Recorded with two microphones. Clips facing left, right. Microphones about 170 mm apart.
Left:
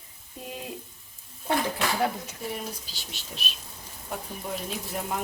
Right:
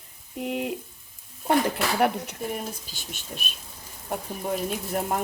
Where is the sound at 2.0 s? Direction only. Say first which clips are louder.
Right 4 dB; 60° right (ahead or behind).